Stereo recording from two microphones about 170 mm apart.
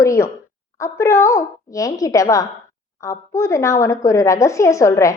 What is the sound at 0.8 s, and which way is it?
A woman's voice, 15° left (ahead or behind).